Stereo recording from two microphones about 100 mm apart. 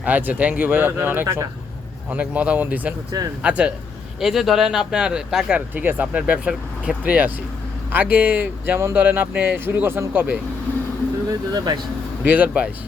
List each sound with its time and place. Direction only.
0.0 s speech: 15° right (ahead or behind)
5.5 s speech: 15° right (ahead or behind)
11.3 s speech: 40° right (ahead or behind)
12.2 s speech: 15° right (ahead or behind)